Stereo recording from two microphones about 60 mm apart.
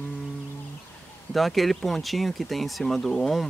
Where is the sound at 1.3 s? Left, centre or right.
Centre.